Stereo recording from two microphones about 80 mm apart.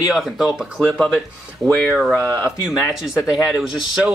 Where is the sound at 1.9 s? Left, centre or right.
Centre.